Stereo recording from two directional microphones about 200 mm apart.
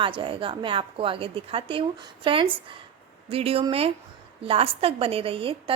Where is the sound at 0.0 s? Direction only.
25° right (ahead or behind).